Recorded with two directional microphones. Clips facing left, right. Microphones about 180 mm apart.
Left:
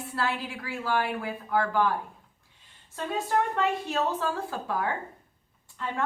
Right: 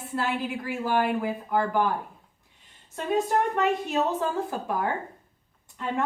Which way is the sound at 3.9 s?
20° right (ahead or behind).